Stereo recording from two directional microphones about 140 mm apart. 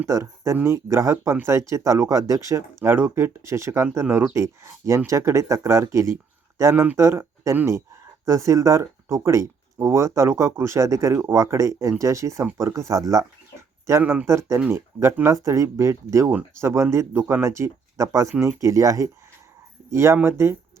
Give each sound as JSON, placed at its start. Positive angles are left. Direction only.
{"t": 0.1, "sound": "speech", "side_deg": -20}